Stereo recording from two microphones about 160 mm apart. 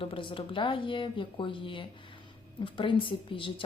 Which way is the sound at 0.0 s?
30° left (ahead or behind).